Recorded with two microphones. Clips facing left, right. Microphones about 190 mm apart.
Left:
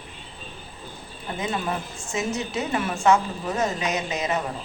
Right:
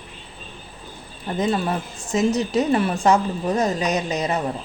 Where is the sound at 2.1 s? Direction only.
35° right (ahead or behind).